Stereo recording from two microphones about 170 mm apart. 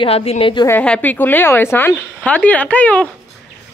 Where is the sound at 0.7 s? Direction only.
10° left (ahead or behind).